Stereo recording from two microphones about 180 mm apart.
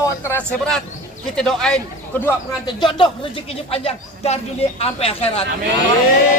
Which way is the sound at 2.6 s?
25° left (ahead or behind).